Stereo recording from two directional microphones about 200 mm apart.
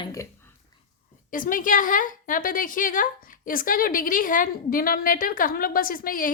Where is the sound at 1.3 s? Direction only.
45° left (ahead or behind).